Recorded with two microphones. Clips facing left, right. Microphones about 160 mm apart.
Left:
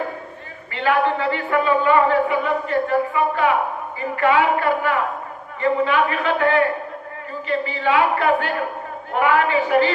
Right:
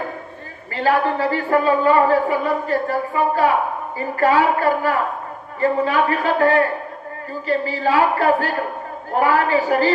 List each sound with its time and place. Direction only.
0.7 s a woman's voice: 40° right (ahead or behind)